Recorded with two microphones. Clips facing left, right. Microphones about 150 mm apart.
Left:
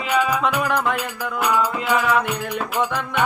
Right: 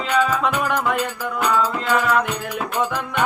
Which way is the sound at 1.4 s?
10° left (ahead or behind).